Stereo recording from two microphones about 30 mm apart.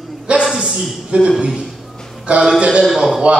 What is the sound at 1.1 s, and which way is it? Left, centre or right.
Speech, right.